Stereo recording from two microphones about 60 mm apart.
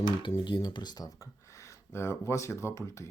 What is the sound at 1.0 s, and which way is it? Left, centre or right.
Speech, left.